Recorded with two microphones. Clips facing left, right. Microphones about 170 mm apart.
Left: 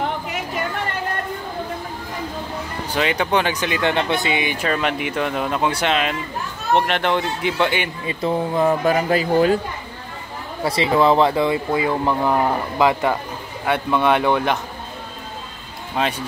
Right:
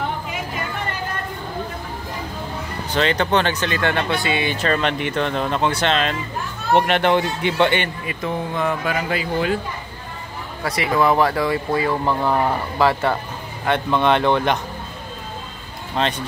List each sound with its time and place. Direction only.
2.9 s speech: 10° left (ahead or behind)
6.7 s speech: 5° right (ahead or behind)
8.0 s speech: 30° left (ahead or behind)
10.6 s speech: 25° left (ahead or behind); by 14.6 s 5° left (ahead or behind)
16.0 s speech: 5° left (ahead or behind)